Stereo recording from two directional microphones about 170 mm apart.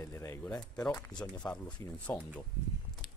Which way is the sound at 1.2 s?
5° left (ahead or behind).